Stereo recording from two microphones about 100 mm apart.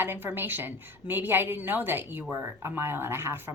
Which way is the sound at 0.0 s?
20° right (ahead or behind).